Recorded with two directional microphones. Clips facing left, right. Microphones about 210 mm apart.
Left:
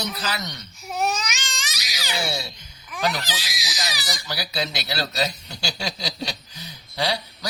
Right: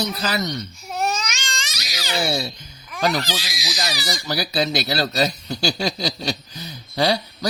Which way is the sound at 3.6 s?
50° right (ahead or behind).